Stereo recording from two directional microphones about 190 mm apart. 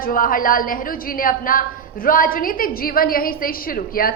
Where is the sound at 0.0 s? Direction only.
45° left (ahead or behind).